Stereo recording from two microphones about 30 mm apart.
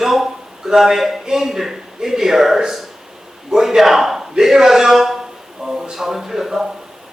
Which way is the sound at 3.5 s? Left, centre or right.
Centre.